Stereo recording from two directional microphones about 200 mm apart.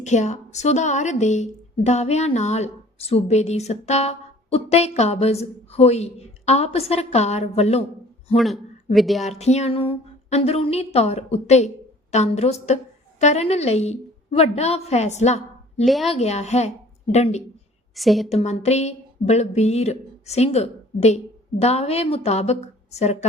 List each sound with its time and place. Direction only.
0.0 s a woman's voice: 35° left (ahead or behind)
8.4 s speech: centre (ahead or behind)
9.2 s a woman's voice: 35° left (ahead or behind)
15.8 s a woman's voice: centre (ahead or behind)
16.0 s a woman's voice: 30° left (ahead or behind)
17.9 s a woman's voice: centre (ahead or behind)
18.3 s a woman's voice: 35° left (ahead or behind)